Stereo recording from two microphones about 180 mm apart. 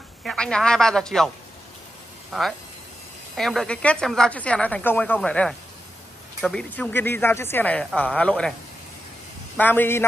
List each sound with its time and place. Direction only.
0.2 s a woman's voice: 5° left (ahead or behind)
2.3 s a woman's voice: centre (ahead or behind)
9.6 s speech: 10° left (ahead or behind)